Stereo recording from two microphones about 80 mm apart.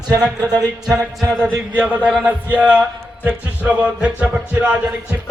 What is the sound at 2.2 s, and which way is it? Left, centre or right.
Music, centre.